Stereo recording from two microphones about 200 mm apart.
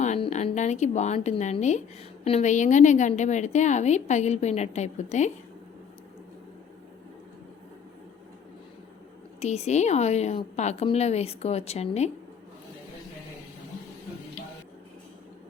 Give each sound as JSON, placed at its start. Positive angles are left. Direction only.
{"t": 0.0, "sound": "a woman's voice", "side_deg": 35}
{"t": 9.4, "sound": "a woman's voice", "side_deg": 35}